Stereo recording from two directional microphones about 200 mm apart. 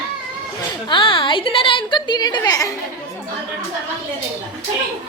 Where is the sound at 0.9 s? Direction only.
25° left (ahead or behind).